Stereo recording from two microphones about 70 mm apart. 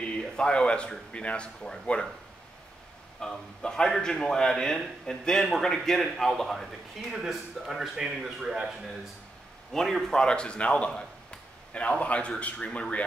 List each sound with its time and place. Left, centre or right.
0.4 s a man's voice: centre
3.2 s a man's voice: centre